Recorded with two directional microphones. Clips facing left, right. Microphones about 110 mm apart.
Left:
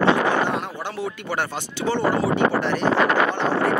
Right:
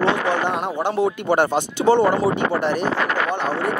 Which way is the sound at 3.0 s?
20° left (ahead or behind).